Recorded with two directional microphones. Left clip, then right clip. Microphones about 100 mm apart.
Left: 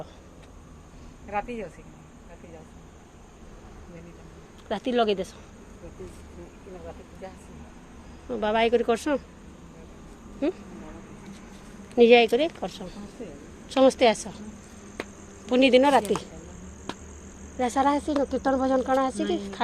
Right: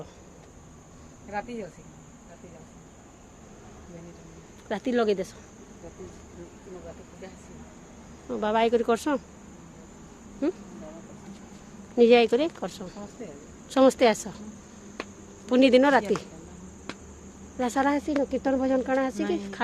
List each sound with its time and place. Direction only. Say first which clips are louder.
1.3 s speech: left 3 dB; 10° right (ahead or behind)
4.7 s speech: left 1 dB; 35° right (ahead or behind)
8.3 s speech: left 1 dB; 25° right (ahead or behind)
10.4 s speech: left 1 dB; 35° right (ahead or behind)
11.9 s speech: left 2 dB; 25° right (ahead or behind); by 14.4 s 40° right (ahead or behind)
15.4 s speech: even; 35° right (ahead or behind)
17.6 s speech: left 2 dB; 30° right (ahead or behind)